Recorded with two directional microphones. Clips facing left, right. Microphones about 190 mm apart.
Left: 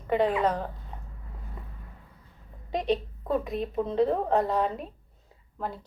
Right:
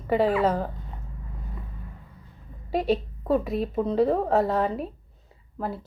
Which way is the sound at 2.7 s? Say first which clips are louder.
Right 3 dB; 5° right (ahead or behind).